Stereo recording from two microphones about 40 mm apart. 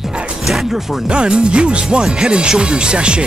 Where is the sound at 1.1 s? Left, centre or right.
Right.